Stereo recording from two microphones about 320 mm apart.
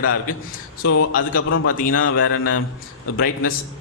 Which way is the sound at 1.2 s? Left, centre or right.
Left.